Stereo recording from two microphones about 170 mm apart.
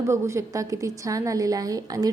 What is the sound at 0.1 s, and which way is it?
A woman's voice, 15° right (ahead or behind).